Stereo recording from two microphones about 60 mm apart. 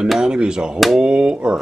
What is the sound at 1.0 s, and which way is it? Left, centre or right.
Speech, centre.